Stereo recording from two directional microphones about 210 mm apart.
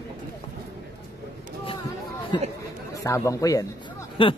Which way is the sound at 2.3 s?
20° left (ahead or behind).